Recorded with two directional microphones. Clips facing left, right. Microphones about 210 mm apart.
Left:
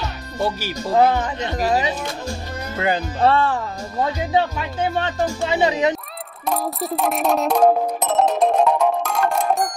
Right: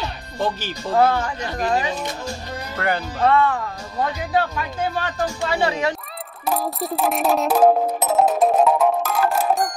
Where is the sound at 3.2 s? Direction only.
30° left (ahead or behind).